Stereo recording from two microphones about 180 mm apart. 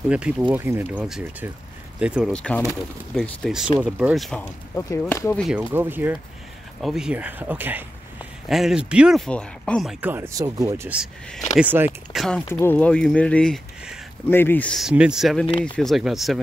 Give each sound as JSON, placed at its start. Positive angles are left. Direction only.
{"t": 0.1, "sound": "speech", "side_deg": -5}
{"t": 2.3, "sound": "speech", "side_deg": 5}
{"t": 4.7, "sound": "speech", "side_deg": 15}
{"t": 5.4, "sound": "speech", "side_deg": -5}
{"t": 12.2, "sound": "speech", "side_deg": 5}